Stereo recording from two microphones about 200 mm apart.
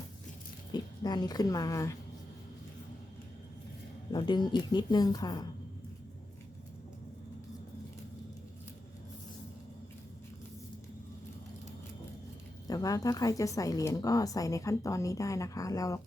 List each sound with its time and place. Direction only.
0.7 s speech: 20° left (ahead or behind)
4.1 s speech: 20° left (ahead or behind)
12.6 s speech: 20° left (ahead or behind)